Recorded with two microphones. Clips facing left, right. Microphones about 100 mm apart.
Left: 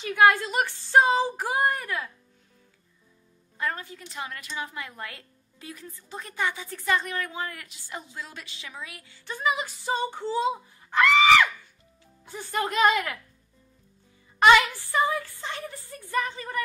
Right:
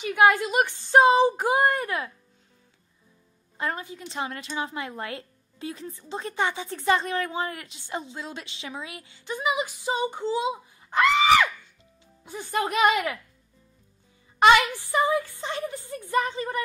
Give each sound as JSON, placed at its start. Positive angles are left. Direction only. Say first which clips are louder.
{"t": 0.0, "sound": "a woman's voice", "louder": "even", "side_deg": -15}
{"t": 3.5, "sound": "a woman's voice", "louder": "right 1 dB", "side_deg": -20}
{"t": 14.6, "sound": "a woman's voice", "louder": "right 1 dB", "side_deg": -20}